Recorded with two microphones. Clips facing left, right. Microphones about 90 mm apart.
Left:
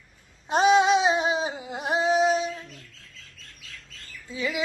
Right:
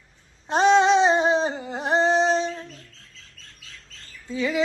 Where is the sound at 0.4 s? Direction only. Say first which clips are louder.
Right 2 dB; 5° left (ahead or behind).